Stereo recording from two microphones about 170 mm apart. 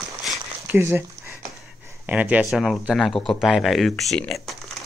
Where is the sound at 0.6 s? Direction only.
15° right (ahead or behind).